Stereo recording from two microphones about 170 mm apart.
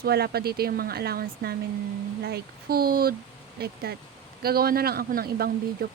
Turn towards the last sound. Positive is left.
turn(degrees=-65)  # may be behind; listen again after turning